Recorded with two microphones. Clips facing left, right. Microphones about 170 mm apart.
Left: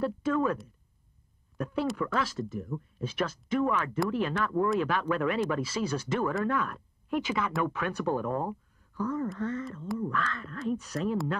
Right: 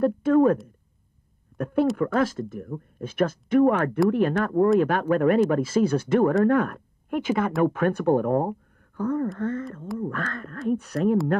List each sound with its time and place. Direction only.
0.0 s speech: 55° right (ahead or behind)
1.6 s speech: 55° right (ahead or behind)